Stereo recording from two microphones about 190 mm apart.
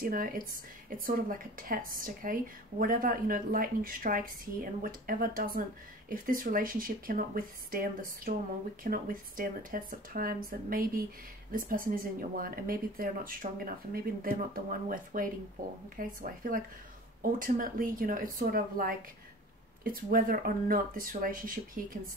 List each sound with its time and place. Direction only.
0.0 s speech: 50° right (ahead or behind)